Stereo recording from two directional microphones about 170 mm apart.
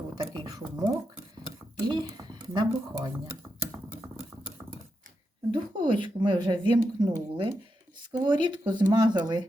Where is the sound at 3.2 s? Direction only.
10° right (ahead or behind).